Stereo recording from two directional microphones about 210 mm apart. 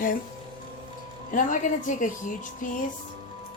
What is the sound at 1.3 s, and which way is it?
A woman's voice, 40° left (ahead or behind).